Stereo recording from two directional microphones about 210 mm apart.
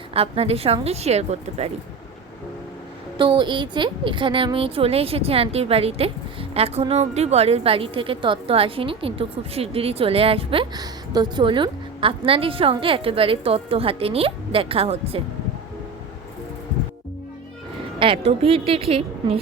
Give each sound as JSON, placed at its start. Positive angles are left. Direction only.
{"t": 0.1, "sound": "a woman's voice", "side_deg": -30}
{"t": 3.2, "sound": "a woman's voice", "side_deg": -20}
{"t": 18.0, "sound": "a woman's voice", "side_deg": -25}